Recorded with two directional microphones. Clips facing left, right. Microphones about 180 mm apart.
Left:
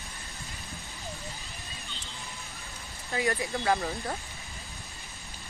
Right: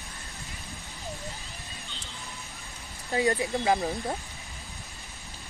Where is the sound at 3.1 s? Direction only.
30° right (ahead or behind).